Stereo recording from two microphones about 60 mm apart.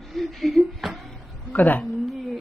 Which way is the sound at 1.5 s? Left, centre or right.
Left.